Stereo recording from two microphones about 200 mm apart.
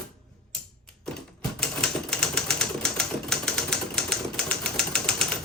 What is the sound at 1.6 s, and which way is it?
Typewriter, 5° left (ahead or behind).